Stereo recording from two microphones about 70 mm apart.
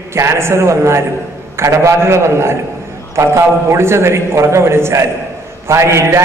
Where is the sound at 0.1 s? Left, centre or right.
Right.